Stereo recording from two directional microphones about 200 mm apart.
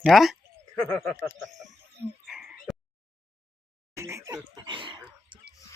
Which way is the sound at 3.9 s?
15° right (ahead or behind).